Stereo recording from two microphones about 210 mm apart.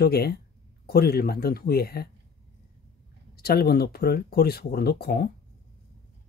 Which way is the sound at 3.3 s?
50° left (ahead or behind).